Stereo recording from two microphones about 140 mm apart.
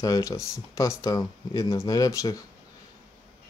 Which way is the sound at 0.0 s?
25° left (ahead or behind).